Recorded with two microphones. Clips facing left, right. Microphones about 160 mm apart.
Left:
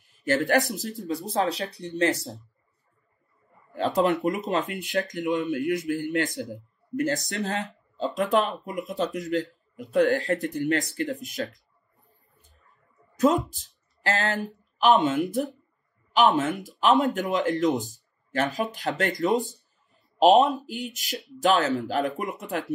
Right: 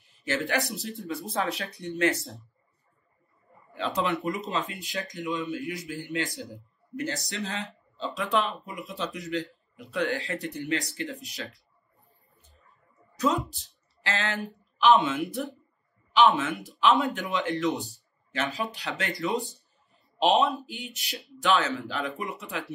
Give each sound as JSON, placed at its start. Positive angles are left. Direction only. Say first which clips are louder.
{"t": 0.2, "sound": "speech", "louder": "left 6 dB", "side_deg": 45}
{"t": 3.7, "sound": "speech", "louder": "left 6 dB", "side_deg": 45}
{"t": 4.5, "sound": "speech", "louder": "left 5 dB", "side_deg": 55}
{"t": 13.1, "sound": "speech", "louder": "left 5 dB", "side_deg": 50}